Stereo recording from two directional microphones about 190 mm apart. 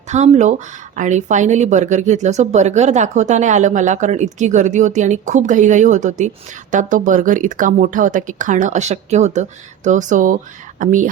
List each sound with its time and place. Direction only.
0.1 s speech: 40° right (ahead or behind)